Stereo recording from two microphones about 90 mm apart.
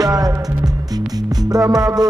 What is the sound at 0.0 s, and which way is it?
Music, 45° right (ahead or behind).